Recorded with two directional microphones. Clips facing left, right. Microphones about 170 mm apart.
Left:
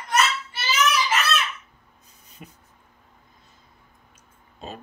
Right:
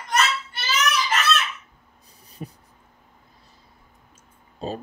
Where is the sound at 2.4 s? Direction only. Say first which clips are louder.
Right 8 dB; 35° right (ahead or behind).